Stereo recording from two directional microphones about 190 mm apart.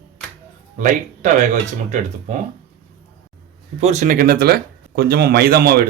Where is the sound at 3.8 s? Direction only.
35° right (ahead or behind).